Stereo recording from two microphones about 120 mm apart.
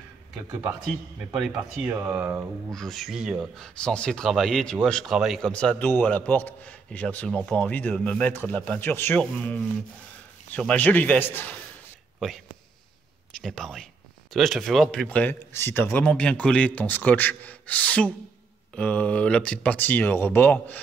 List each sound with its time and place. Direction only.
1.3 s speech: 5° right (ahead or behind)
2.0 s speech: 20° right (ahead or behind)
2.7 s speech: centre (ahead or behind)
5.1 s speech: 5° right (ahead or behind)
5.4 s speech: 10° left (ahead or behind)
10.5 s speech: 10° left (ahead or behind)
13.4 s speech: 5° left (ahead or behind)